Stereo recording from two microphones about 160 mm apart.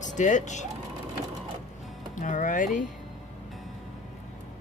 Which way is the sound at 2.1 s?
55° left (ahead or behind).